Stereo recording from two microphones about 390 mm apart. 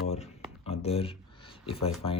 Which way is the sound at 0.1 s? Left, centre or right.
Centre.